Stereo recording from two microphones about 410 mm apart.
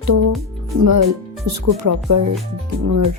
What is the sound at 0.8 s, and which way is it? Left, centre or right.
Speech, right.